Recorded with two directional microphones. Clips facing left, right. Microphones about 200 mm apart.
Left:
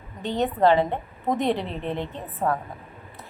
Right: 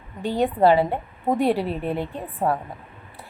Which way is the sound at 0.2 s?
10° right (ahead or behind).